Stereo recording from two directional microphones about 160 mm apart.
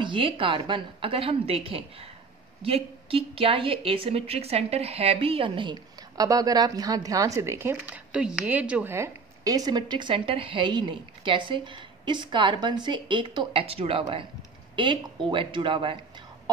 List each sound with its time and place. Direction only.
0.0 s a woman's voice: 30° right (ahead or behind)